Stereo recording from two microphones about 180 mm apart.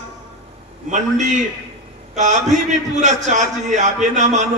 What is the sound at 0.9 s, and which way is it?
Speech, 40° right (ahead or behind).